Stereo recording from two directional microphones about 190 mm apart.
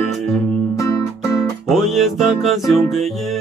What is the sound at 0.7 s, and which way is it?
Music, 20° left (ahead or behind).